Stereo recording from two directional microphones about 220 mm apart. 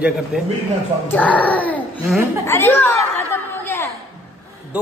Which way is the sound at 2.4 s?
10° left (ahead or behind).